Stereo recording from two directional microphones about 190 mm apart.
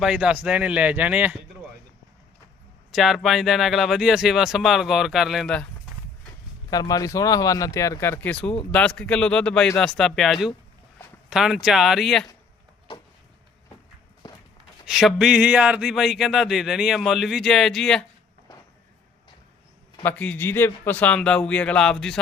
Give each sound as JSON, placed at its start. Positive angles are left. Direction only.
{"t": 0.0, "sound": "speech", "side_deg": -5}
{"t": 2.9, "sound": "speech", "side_deg": 0}
{"t": 6.7, "sound": "speech", "side_deg": 20}
{"t": 14.2, "sound": "walk", "side_deg": 20}
{"t": 14.8, "sound": "speech", "side_deg": 0}
{"t": 20.0, "sound": "speech", "side_deg": 10}